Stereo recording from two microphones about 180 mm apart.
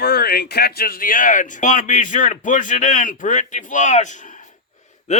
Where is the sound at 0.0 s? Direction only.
60° left (ahead or behind).